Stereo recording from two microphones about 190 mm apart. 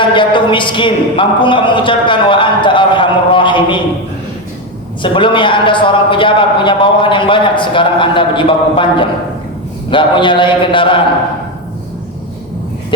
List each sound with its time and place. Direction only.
0.0 s a man's voice: 25° left (ahead or behind)
5.0 s a man's voice: 25° left (ahead or behind)